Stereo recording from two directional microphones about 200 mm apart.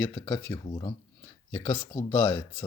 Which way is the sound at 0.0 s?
15° left (ahead or behind).